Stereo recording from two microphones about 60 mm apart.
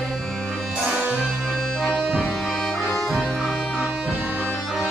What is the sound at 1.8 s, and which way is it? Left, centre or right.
Bagpipes, centre.